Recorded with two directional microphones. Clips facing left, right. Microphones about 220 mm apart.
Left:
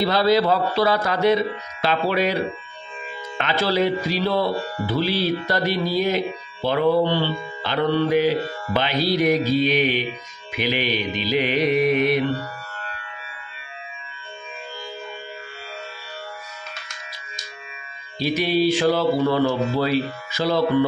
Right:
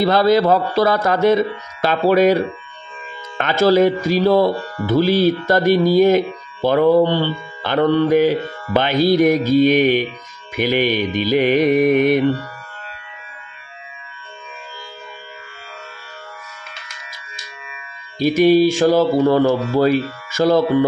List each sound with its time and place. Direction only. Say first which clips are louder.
0.0 s speech: right 4 dB; 50° right (ahead or behind)
18.2 s speech: right 8 dB; 45° right (ahead or behind)